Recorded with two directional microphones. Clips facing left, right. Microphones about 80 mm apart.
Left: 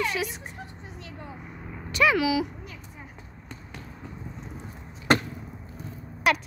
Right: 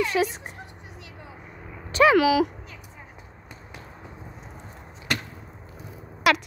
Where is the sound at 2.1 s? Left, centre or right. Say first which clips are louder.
Right 6 dB; right.